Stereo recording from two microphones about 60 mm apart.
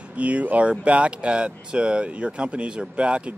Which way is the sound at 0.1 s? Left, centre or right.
Right.